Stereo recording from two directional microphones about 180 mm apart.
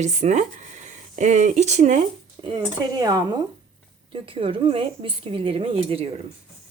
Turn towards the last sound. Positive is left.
turn(degrees=-30)  # may be behind; listen again after turning